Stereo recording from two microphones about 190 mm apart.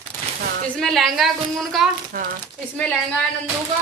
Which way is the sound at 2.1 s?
45° right (ahead or behind).